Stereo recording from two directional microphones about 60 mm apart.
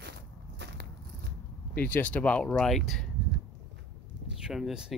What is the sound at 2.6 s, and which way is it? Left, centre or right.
Speech, centre.